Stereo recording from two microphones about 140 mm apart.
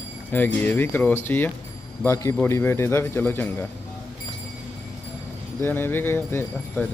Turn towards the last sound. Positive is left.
turn(degrees=15)  # may be behind; listen again after turning